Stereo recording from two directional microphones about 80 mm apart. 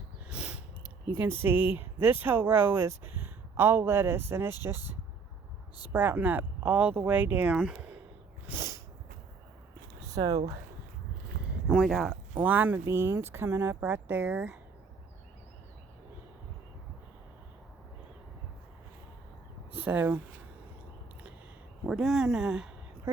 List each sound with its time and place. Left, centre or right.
0.3 s a sound: centre
1.2 s speech: right
8.5 s sneeze: right
10.1 s speech: right
11.7 s speech: centre
12.4 s speech: right
13.8 s speech: right
19.8 s speech: right
21.8 s speech: centre